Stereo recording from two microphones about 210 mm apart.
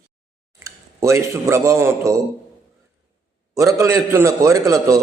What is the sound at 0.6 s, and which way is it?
A man's voice, 15° right (ahead or behind).